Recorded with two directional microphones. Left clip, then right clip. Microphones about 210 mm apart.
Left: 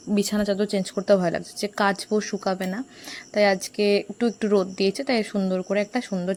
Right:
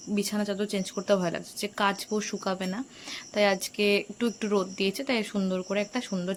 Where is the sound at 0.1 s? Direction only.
30° left (ahead or behind).